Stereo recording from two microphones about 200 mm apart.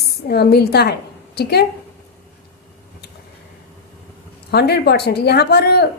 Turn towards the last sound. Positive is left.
turn(degrees=55)  # may be behind; listen again after turning